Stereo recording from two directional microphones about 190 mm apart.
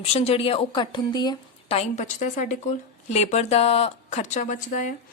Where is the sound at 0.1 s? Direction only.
35° left (ahead or behind).